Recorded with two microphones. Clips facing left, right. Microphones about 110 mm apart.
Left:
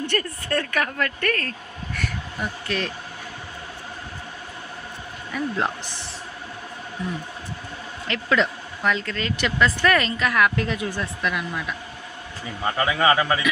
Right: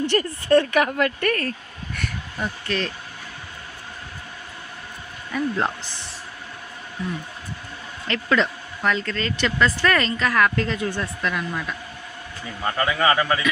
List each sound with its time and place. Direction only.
0.2 s a woman's voice: 20° right (ahead or behind)
2.0 s speech: centre (ahead or behind)
5.3 s speech: centre (ahead or behind)
8.0 s speech: 5° left (ahead or behind)